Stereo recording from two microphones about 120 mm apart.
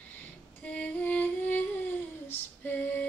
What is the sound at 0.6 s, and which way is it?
Music, 10° left (ahead or behind).